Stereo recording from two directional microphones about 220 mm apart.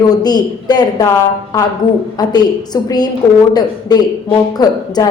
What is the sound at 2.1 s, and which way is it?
Speech, 20° left (ahead or behind).